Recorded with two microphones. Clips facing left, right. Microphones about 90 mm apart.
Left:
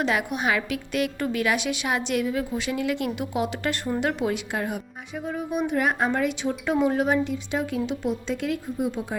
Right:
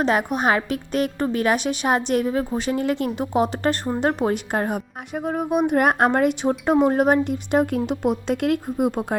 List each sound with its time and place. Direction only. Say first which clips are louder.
0.0 s a woman's voice: right 5 dB; 40° right (ahead or behind); by 9.1 s 55° right (ahead or behind)